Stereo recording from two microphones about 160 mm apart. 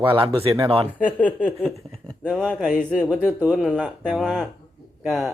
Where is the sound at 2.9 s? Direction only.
10° right (ahead or behind).